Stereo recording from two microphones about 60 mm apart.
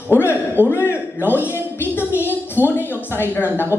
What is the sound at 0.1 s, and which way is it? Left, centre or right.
A man's voice, left.